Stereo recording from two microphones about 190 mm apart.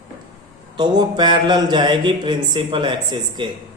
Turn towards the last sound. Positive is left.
turn(degrees=-25)  # may be behind; listen again after turning